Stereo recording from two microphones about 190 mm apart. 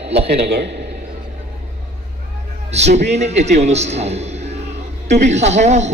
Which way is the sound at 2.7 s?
35° right (ahead or behind).